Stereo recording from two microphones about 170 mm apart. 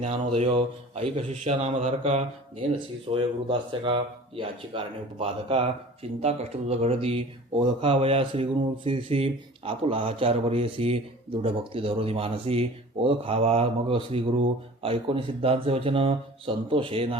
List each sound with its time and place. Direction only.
0.0 s speech: 35° right (ahead or behind)